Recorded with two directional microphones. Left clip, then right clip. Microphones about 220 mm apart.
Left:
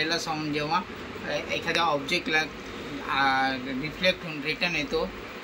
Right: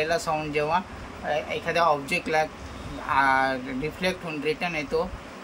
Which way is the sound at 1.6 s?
20° right (ahead or behind).